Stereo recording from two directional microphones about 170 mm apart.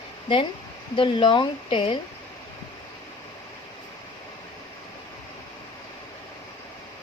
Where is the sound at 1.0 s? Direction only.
30° left (ahead or behind).